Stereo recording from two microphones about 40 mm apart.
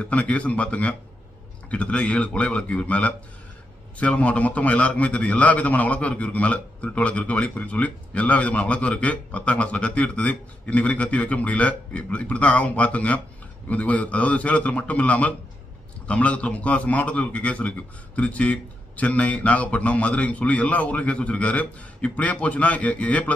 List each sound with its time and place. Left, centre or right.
0.0 s a man's voice: left